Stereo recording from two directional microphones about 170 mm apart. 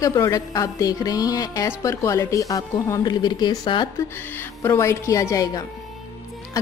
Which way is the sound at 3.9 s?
15° left (ahead or behind).